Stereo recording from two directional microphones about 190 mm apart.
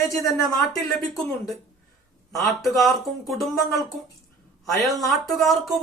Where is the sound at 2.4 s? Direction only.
Centre (ahead or behind).